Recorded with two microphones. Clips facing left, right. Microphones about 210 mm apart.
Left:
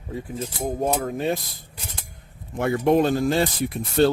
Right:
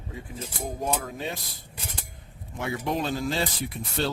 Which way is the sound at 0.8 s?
50° left (ahead or behind).